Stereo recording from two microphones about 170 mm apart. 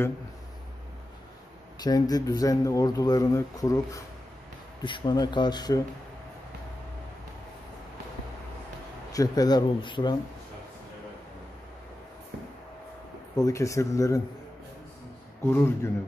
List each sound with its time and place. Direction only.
1.8 s speech: 25° left (ahead or behind)
9.1 s speech: 20° left (ahead or behind)
13.4 s speech: 20° left (ahead or behind)
15.4 s speech: 15° left (ahead or behind)